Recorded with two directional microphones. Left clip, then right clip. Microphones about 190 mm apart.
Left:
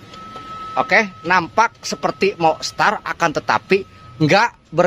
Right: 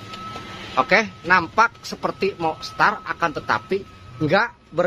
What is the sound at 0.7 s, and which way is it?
A man's voice, 30° left (ahead or behind).